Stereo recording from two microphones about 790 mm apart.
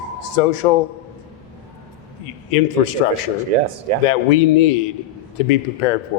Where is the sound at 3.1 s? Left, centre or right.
Right.